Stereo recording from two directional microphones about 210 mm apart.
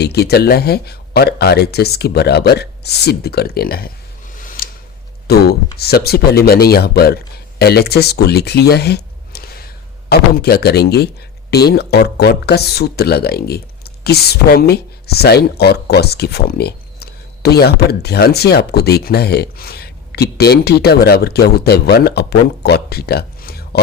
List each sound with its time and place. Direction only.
0.0 s speech: 50° left (ahead or behind)
4.4 s a sound: 40° left (ahead or behind)
5.3 s speech: 50° left (ahead or behind)